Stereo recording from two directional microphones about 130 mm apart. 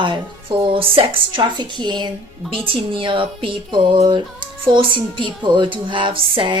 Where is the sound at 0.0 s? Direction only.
35° right (ahead or behind).